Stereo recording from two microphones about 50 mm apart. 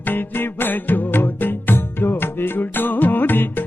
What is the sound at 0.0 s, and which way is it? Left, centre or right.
Music, left.